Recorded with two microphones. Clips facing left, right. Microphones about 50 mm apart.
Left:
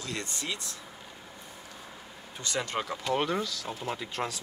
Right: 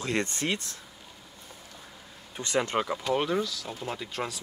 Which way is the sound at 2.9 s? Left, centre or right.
Centre.